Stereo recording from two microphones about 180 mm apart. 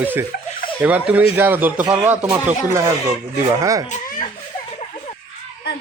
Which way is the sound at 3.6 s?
20° right (ahead or behind).